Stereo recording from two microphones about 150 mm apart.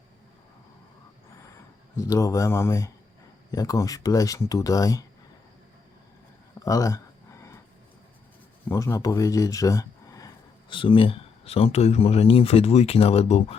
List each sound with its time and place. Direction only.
2.0 s speech: 20° left (ahead or behind)
6.7 s a sound: 20° left (ahead or behind)
8.7 s speech: 20° left (ahead or behind); by 13.6 s 45° left (ahead or behind)